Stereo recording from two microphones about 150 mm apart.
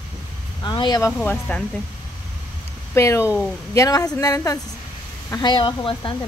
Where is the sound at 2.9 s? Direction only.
20° left (ahead or behind); by 6.2 s 35° left (ahead or behind).